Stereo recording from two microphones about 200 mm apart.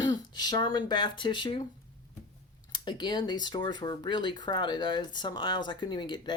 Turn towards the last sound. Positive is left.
turn(degrees=20)  # may be behind; listen again after turning